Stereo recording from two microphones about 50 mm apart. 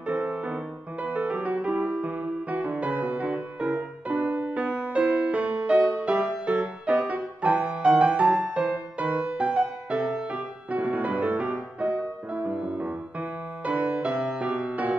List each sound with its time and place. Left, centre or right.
0.0 s music: right
10.7 s music: right